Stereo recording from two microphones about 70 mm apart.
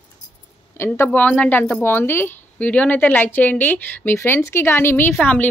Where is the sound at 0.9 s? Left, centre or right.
Left.